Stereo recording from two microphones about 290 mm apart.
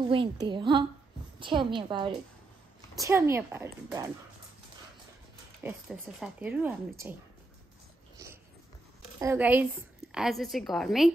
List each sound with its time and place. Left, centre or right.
0.1 s a woman's voice: centre
5.6 s a woman's voice: centre
9.2 s a woman's voice: centre